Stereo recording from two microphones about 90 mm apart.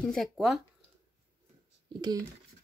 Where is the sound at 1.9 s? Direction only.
50° right (ahead or behind).